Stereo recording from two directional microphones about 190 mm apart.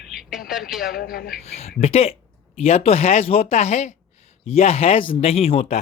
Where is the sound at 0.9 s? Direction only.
55° left (ahead or behind).